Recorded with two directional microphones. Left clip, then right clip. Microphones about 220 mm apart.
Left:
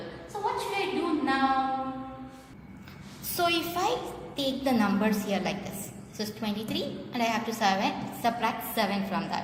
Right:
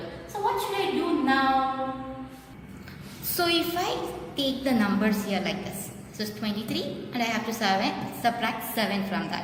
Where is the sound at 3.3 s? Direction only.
30° left (ahead or behind).